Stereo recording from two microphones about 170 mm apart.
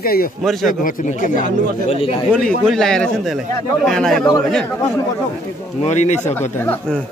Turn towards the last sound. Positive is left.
turn(degrees=10)  # may be behind; listen again after turning